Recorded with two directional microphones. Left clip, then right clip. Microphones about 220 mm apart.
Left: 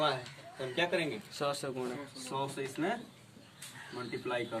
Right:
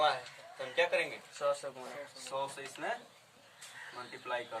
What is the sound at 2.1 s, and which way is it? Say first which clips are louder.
Speech: left 1 dB; 10° right (ahead or behind).